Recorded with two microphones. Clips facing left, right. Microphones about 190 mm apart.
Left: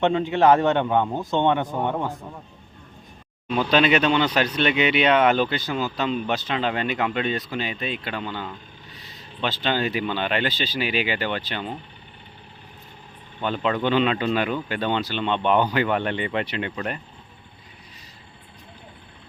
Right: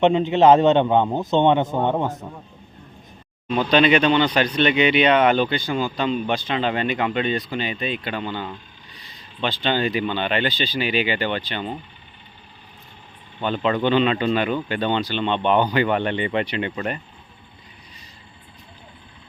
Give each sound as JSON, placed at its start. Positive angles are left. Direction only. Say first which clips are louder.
{"t": 0.0, "sound": "a man's voice", "louder": "right 4 dB", "side_deg": -20}
{"t": 3.5, "sound": "speech", "louder": "right 2 dB", "side_deg": 5}
{"t": 13.4, "sound": "speech", "louder": "right 2 dB", "side_deg": 0}